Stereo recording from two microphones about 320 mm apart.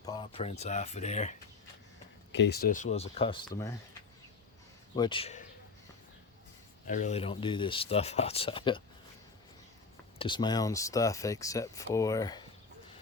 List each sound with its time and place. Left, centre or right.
0.0 s speech: centre
2.3 s speech: left; by 3.8 s centre
4.9 s speech: centre
6.8 s speech: left
10.2 s speech: centre